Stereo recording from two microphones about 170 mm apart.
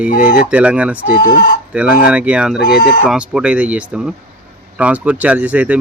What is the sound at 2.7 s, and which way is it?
Speech, 60° left (ahead or behind).